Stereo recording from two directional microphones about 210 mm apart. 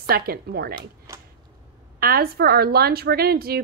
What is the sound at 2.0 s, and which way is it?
A woman's voice, 45° right (ahead or behind).